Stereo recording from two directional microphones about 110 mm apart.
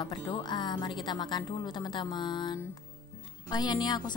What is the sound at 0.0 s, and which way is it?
A woman's voice, 45° left (ahead or behind).